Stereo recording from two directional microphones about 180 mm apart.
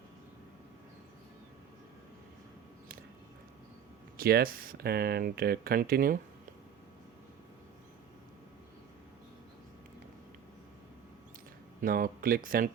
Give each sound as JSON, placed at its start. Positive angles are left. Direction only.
{"t": 4.2, "sound": "speech", "side_deg": -55}
{"t": 11.8, "sound": "speech", "side_deg": -50}